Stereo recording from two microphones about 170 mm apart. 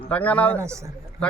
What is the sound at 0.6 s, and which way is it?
Speech, 15° right (ahead or behind).